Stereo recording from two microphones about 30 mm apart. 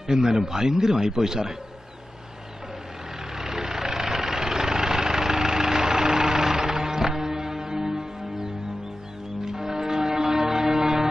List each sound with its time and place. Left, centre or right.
0.0 s a man's voice: centre
3.3 s vehicle: centre
9.4 s a sound: centre